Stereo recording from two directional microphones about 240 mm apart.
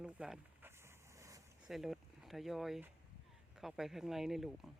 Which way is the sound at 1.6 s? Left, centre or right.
Centre.